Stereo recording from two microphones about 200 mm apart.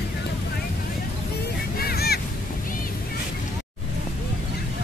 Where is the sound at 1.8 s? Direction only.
50° left (ahead or behind).